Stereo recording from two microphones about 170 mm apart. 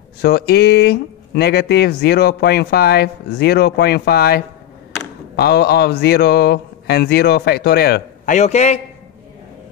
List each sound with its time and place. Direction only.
0.2 s speech: 70° left (ahead or behind)
8.3 s a man's voice: 45° left (ahead or behind)